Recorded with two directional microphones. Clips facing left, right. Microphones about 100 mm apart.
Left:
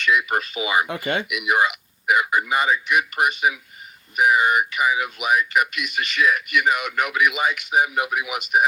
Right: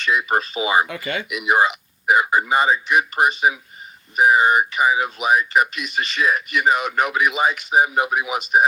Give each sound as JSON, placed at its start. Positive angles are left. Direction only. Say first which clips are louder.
{"t": 0.0, "sound": "speech", "louder": "right 1 dB", "side_deg": -30}
{"t": 0.9, "sound": "speech", "louder": "left 2 dB", "side_deg": 25}
{"t": 1.3, "sound": "speech", "louder": "right 5 dB", "side_deg": -30}